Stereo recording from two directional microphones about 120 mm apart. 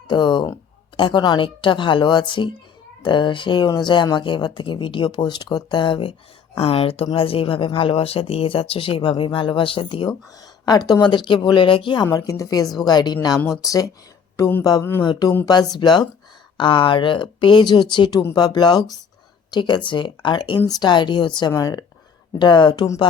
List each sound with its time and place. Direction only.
0.1 s speech: 40° left (ahead or behind)
12.0 s a woman's voice: 30° left (ahead or behind)